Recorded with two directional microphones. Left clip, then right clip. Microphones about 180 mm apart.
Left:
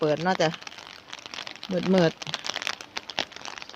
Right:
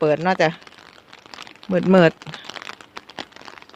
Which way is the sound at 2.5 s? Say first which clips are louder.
Left 5 dB; 25° right (ahead or behind).